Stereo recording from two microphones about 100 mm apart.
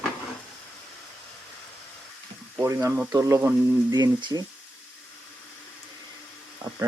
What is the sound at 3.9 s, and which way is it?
Speech, 45° right (ahead or behind).